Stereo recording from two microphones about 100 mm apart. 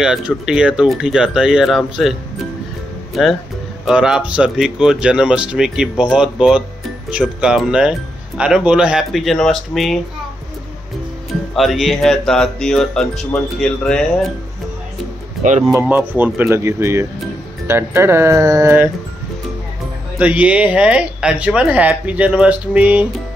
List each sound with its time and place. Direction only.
0.0 s speech: 5° right (ahead or behind)
3.8 s speech: 5° right (ahead or behind)
11.5 s speech: centre (ahead or behind)
15.9 s speech: 20° right (ahead or behind)
20.2 s speech: 15° right (ahead or behind)